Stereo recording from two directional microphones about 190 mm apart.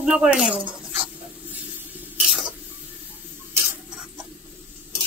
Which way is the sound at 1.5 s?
10° right (ahead or behind).